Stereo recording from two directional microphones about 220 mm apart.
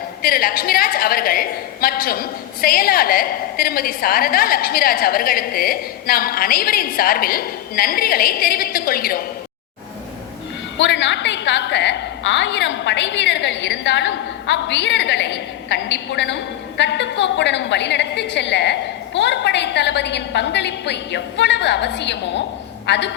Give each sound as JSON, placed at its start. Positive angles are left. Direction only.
{"t": 0.2, "sound": "a woman's voice", "side_deg": 40}
{"t": 10.8, "sound": "a woman's voice", "side_deg": 55}